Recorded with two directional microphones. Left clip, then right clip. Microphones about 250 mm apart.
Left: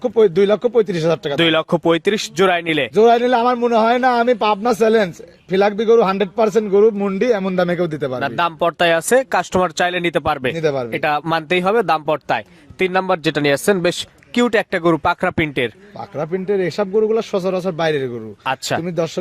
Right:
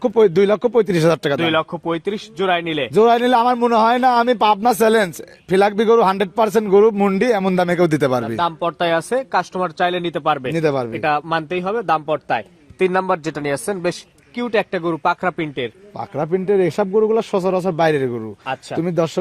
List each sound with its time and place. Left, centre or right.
0.0 s speech: right
1.4 s speech: left
2.9 s speech: right
8.4 s speech: left
10.5 s speech: right
11.0 s speech: left
12.8 s speech: centre
16.0 s speech: right
18.4 s speech: left
18.8 s speech: right